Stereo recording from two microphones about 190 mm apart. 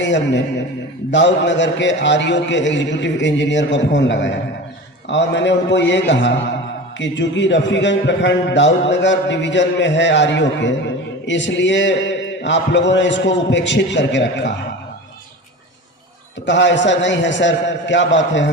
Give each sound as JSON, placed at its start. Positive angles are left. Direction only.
{"t": 0.0, "sound": "a man's voice", "side_deg": 70}
{"t": 16.5, "sound": "a man's voice", "side_deg": 70}